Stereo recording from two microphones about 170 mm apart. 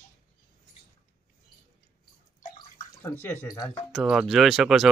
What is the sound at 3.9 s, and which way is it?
Speech, centre (ahead or behind).